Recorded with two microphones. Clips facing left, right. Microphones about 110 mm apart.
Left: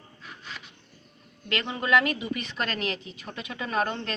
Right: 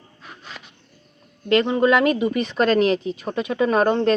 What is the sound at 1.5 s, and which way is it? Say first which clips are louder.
Speech: right 10 dB; 35° right (ahead or behind).